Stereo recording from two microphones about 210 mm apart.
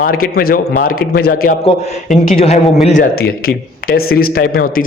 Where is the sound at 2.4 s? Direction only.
30° left (ahead or behind).